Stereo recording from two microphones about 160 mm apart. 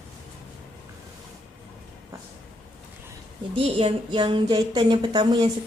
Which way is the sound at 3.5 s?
35° right (ahead or behind).